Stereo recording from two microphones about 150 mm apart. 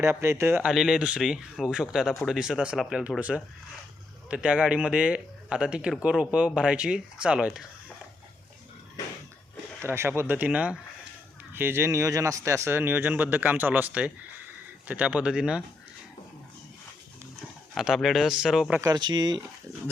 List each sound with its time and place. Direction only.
0.0 s speech: 15° right (ahead or behind)
0.7 s speech: 5° right (ahead or behind)
9.8 s speech: 15° right (ahead or behind)
17.7 s speech: centre (ahead or behind)
18.8 s speech: 25° right (ahead or behind)